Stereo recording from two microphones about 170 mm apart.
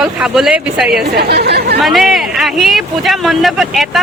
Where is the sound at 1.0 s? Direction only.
70° right (ahead or behind).